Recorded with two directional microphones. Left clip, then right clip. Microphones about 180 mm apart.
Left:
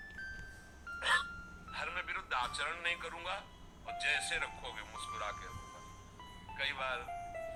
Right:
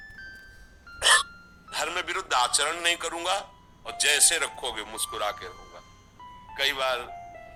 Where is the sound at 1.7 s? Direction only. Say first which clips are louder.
Right 11 dB; 50° right (ahead or behind).